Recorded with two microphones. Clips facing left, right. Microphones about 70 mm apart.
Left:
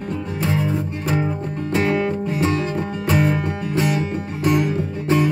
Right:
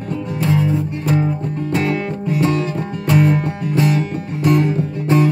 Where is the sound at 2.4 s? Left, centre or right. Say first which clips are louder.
Right 2 dB; centre.